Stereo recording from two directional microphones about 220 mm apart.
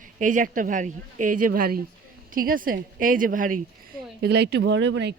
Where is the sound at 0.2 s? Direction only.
35° right (ahead or behind).